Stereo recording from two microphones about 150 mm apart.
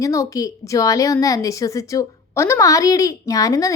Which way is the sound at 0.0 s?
20° left (ahead or behind).